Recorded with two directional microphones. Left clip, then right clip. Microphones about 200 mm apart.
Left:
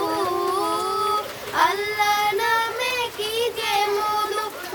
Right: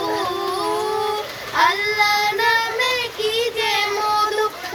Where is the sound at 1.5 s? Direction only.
15° left (ahead or behind).